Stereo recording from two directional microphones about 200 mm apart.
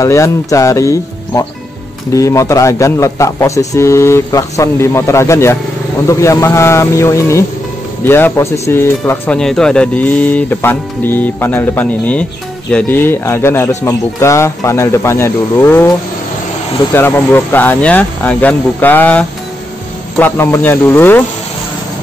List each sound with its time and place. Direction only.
0.0 s speech: 15° left (ahead or behind)
16.9 s speech: 10° left (ahead or behind)